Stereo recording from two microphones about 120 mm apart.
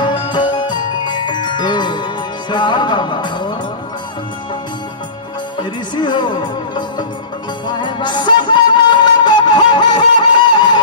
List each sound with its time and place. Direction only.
0.0 s glockenspiel: 40° left (ahead or behind)
2.5 s music: 40° left (ahead or behind)
5.6 s music: 40° left (ahead or behind)